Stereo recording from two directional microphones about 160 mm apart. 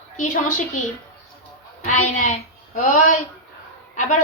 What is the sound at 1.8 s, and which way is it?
A woman's voice, 50° left (ahead or behind).